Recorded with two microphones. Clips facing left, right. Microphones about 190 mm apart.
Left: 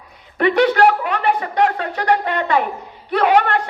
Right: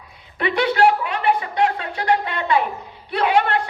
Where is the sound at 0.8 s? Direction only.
60° left (ahead or behind).